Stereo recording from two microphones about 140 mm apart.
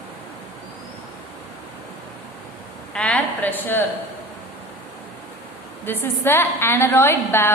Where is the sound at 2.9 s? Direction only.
10° left (ahead or behind).